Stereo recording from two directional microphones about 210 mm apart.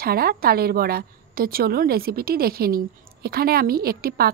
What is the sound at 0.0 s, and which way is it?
A woman's voice, 45° right (ahead or behind).